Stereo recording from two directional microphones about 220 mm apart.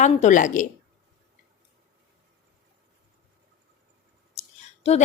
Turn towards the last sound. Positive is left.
turn(degrees=30)  # may be behind; listen again after turning